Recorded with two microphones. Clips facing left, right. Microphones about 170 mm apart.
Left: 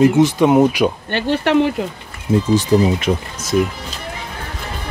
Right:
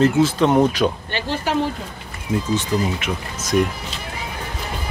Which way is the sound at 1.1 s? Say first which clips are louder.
Left 7 dB; 65° left (ahead or behind).